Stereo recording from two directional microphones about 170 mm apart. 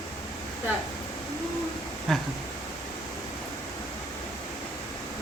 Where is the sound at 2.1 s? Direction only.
Centre (ahead or behind).